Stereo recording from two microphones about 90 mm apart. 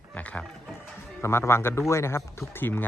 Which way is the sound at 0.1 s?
15° left (ahead or behind).